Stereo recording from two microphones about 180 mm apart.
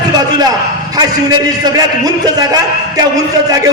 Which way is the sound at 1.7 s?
20° right (ahead or behind).